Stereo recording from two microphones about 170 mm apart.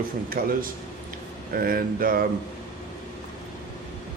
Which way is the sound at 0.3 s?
55° right (ahead or behind).